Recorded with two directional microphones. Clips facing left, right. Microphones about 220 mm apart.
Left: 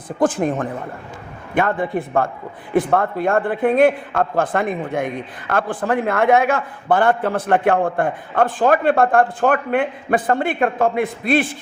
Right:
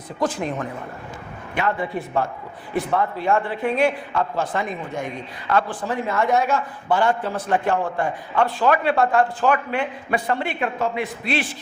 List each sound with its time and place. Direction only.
0.2 s speech: 50° left (ahead or behind)